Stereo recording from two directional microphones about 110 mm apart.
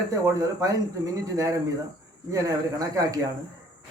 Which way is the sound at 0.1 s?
35° right (ahead or behind).